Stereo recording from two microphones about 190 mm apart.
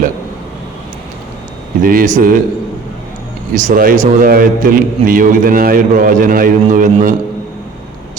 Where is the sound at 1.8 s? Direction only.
45° right (ahead or behind).